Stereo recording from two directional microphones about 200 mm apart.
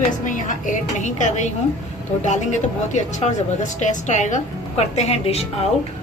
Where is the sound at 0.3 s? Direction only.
40° left (ahead or behind).